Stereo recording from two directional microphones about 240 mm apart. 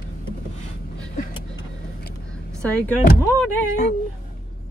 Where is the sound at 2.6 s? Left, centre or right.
Centre.